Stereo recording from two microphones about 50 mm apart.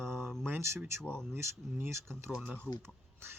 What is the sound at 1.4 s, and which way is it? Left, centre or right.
Speech, right.